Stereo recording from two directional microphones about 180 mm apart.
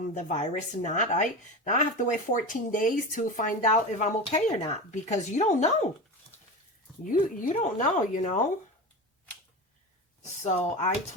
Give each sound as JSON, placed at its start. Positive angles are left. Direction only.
{"t": 0.1, "sound": "a woman's voice", "side_deg": 40}
{"t": 7.0, "sound": "a woman's voice", "side_deg": 45}
{"t": 10.4, "sound": "speech", "side_deg": 40}